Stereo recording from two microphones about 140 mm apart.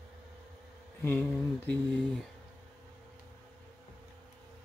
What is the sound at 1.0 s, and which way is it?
Speech, 10° left (ahead or behind).